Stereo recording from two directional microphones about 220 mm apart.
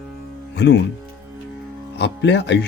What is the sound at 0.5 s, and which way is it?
Speech, 50° left (ahead or behind).